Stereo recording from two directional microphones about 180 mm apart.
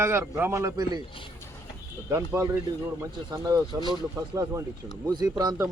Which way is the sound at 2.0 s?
15° right (ahead or behind).